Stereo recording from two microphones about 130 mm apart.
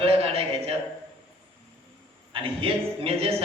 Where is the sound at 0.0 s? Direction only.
50° right (ahead or behind).